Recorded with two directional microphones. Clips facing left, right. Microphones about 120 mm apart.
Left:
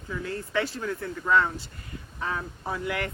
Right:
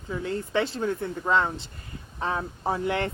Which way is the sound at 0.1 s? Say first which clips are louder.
Right 3 dB; 25° right (ahead or behind).